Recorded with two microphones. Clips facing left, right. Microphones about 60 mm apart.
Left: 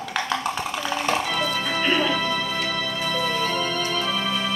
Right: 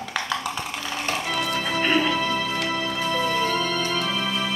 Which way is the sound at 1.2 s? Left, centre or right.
Centre.